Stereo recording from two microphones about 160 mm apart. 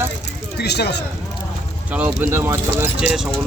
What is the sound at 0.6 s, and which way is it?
Speech, 90° left.